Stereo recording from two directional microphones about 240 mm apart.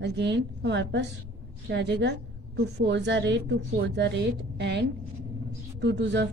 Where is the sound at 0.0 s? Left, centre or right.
Right.